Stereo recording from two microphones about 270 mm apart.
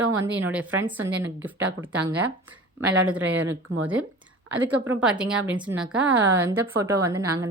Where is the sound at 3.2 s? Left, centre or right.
Right.